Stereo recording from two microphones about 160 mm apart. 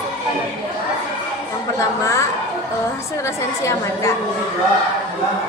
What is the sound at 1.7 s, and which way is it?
Speech, 20° left (ahead or behind).